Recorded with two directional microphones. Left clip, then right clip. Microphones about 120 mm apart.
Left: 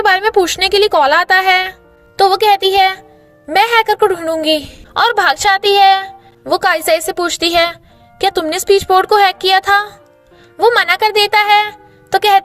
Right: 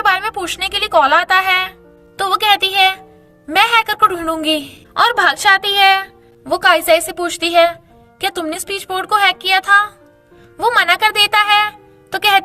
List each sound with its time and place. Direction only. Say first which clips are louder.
0.0 s a woman's voice: left 5 dB; 55° left (ahead or behind)
2.2 s a woman's voice: left 4 dB; 40° left (ahead or behind)
10.6 s a woman's voice: left 2 dB; 35° left (ahead or behind)